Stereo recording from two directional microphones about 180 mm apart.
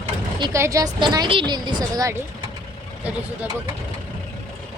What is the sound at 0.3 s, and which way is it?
A woman's voice, 25° right (ahead or behind).